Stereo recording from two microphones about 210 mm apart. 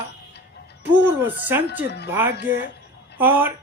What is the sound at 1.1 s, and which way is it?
Speech, 10° right (ahead or behind).